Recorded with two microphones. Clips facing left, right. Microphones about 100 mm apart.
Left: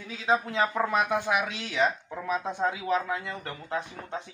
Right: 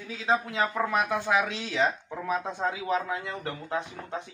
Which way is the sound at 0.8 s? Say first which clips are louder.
Left 1 dB; 15° left (ahead or behind).